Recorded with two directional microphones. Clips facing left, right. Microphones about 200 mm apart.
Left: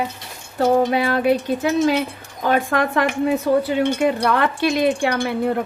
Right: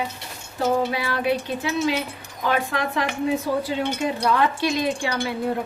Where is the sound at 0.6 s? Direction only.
55° left (ahead or behind).